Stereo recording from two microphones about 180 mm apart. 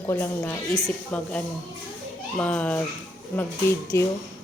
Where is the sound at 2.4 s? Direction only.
5° left (ahead or behind).